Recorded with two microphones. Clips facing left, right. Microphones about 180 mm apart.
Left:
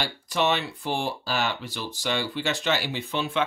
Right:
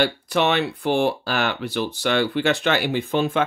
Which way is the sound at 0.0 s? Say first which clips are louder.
Right 6 dB; 65° right (ahead or behind).